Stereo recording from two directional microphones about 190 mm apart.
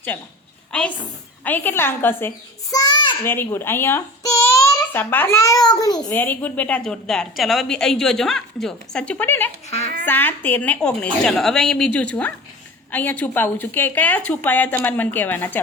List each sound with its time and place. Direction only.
0.1 s a woman's voice: 10° left (ahead or behind); by 3.2 s 25° left (ahead or behind)
3.2 s speech: 10° left (ahead or behind)
6.1 s a woman's voice: 10° left (ahead or behind)
9.6 s a child's voice: 35° left (ahead or behind)
10.1 s a woman's voice: 10° left (ahead or behind)